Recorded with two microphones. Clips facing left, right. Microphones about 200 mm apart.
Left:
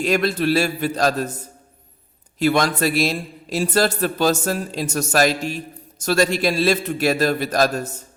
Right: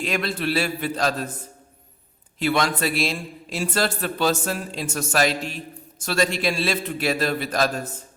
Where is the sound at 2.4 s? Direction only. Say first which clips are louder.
Left 4 dB; 45° left (ahead or behind).